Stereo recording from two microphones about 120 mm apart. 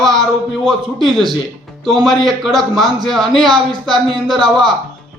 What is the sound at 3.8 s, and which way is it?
Speech, 40° right (ahead or behind).